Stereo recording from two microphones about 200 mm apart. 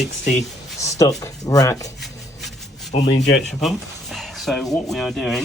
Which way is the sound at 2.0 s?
Centre (ahead or behind).